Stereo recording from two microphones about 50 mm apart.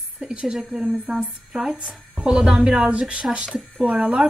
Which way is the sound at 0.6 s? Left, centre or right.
Centre.